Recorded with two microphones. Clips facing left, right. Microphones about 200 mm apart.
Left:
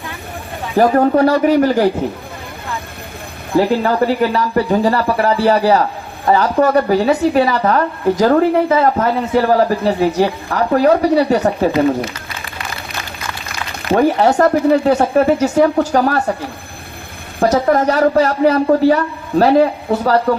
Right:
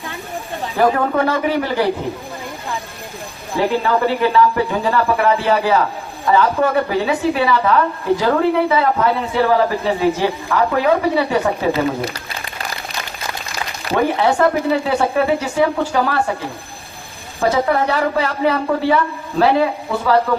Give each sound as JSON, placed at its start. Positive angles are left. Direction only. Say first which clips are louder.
{"t": 0.8, "sound": "a woman's voice", "louder": "left 5 dB", "side_deg": 40}
{"t": 3.8, "sound": "a woman's voice", "louder": "left 2 dB", "side_deg": 40}
{"t": 13.9, "sound": "speech", "louder": "left 4 dB", "side_deg": 40}
{"t": 17.5, "sound": "a woman's voice", "louder": "left 3 dB", "side_deg": 40}